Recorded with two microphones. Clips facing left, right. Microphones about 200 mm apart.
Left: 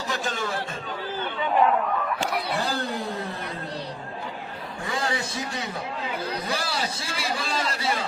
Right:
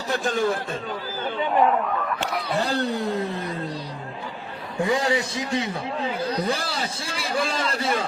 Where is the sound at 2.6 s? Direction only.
70° right (ahead or behind).